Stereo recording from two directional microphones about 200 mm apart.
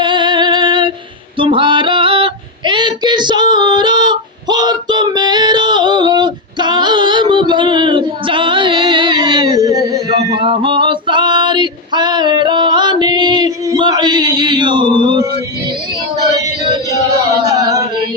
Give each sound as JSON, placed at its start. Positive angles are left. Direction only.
{"t": 0.0, "sound": "music", "side_deg": -25}
{"t": 1.4, "sound": "female singing", "side_deg": -25}